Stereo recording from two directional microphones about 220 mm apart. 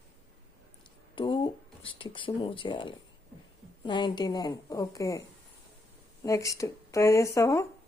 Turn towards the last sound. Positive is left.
turn(degrees=15)  # may be behind; listen again after turning